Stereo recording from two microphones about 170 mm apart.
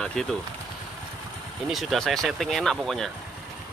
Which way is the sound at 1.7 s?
Centre (ahead or behind).